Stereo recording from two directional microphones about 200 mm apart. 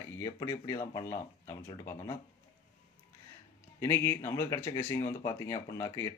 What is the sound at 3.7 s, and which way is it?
Speech, 15° left (ahead or behind).